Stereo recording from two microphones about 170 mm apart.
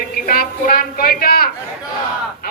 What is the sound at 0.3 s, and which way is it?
A man's voice, 55° left (ahead or behind).